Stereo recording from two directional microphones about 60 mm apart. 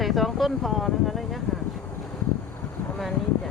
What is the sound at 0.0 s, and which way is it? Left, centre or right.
Speech, centre.